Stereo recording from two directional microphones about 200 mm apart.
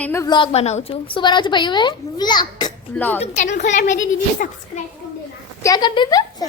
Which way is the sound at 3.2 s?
35° left (ahead or behind).